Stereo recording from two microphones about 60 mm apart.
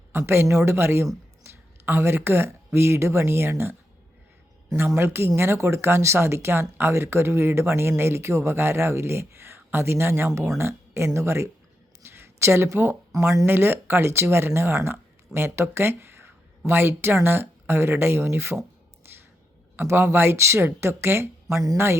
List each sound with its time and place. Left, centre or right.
0.1 s speech: right
1.5 s a sound: right
2.7 s speech: right
4.9 s speech: right
10.2 s speech: right
10.6 s speech: right
12.0 s a sound: right
12.7 s speech: right
13.4 s speech: right
19.7 s speech: right
21.5 s speech: right